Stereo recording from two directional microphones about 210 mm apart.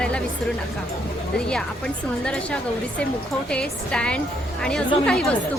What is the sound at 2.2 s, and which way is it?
A woman's voice, 5° left (ahead or behind).